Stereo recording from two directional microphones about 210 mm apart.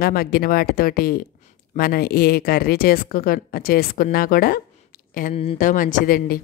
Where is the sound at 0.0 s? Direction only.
45° left (ahead or behind).